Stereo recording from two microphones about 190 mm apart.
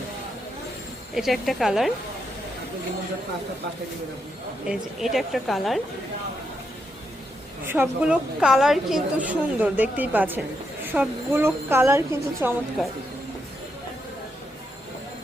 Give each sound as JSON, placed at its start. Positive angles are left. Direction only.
{"t": 1.1, "sound": "a woman's voice", "side_deg": 0}
{"t": 4.7, "sound": "a woman's voice", "side_deg": 0}
{"t": 7.6, "sound": "a woman's voice", "side_deg": -10}